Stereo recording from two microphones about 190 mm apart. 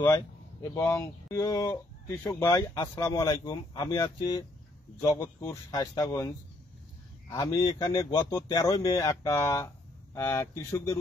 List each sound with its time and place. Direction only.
0.0 s speech: 15° left (ahead or behind)